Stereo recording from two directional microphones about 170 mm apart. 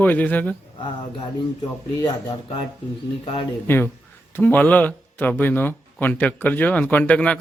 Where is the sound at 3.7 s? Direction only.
15° left (ahead or behind).